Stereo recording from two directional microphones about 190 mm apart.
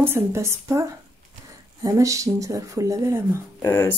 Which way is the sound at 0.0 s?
15° right (ahead or behind).